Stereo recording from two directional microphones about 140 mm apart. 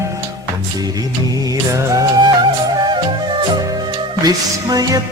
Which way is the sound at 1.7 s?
25° right (ahead or behind).